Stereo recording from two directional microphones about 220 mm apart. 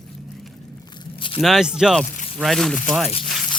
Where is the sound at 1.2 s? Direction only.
25° left (ahead or behind).